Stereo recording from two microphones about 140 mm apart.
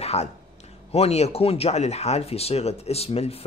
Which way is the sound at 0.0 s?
50° left (ahead or behind).